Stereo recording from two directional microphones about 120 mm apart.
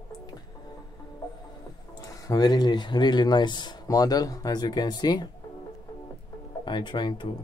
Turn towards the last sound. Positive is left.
turn(degrees=40)  # may be behind; listen again after turning